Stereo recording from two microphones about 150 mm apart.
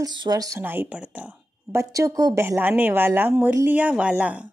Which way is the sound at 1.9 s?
20° right (ahead or behind).